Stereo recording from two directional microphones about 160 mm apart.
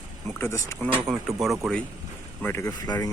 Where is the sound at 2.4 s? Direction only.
15° left (ahead or behind).